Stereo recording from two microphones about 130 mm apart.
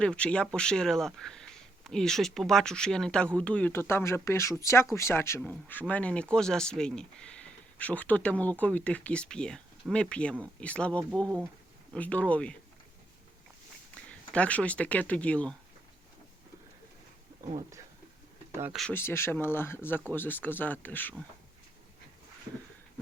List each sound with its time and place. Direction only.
0.0 s speech: 10° left (ahead or behind)
14.1 s speech: 10° left (ahead or behind)
18.9 s speech: 15° left (ahead or behind)